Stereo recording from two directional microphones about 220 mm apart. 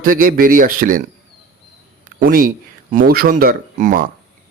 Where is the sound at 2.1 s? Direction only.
40° right (ahead or behind).